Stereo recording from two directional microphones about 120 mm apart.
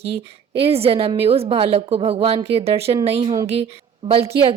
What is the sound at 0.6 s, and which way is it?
Speech, 55° right (ahead or behind).